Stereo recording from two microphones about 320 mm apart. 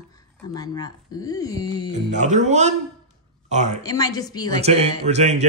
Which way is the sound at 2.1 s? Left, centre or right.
Right.